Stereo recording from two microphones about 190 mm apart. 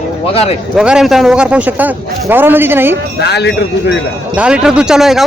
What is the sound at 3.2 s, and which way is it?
Speech, 60° left (ahead or behind).